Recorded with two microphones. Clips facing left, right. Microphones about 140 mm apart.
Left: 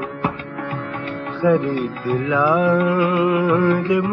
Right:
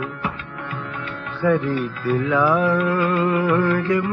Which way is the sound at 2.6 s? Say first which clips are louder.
Left 3 dB; 20° left (ahead or behind).